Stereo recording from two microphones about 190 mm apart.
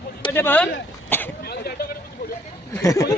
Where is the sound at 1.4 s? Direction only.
55° left (ahead or behind).